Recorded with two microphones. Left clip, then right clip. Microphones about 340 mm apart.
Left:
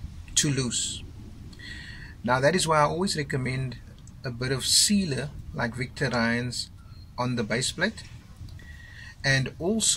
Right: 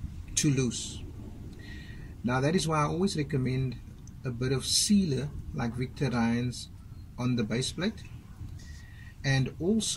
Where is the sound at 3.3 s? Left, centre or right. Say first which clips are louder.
Left 2 dB; left.